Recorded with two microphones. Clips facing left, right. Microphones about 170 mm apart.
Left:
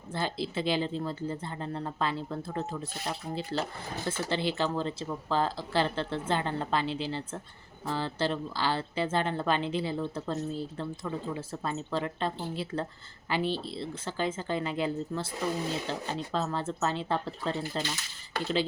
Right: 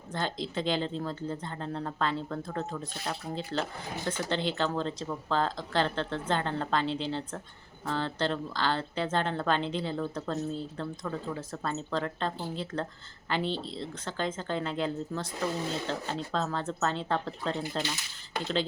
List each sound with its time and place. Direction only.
0.1 s speech: 5° left (ahead or behind)
18.3 s speech: 20° right (ahead or behind)